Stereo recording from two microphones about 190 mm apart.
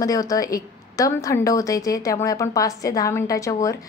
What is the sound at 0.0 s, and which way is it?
A woman's voice, 15° left (ahead or behind).